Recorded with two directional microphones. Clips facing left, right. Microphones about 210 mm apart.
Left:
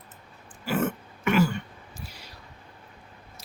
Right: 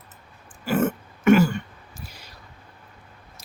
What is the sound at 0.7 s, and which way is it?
Throat clearing, 45° right (ahead or behind).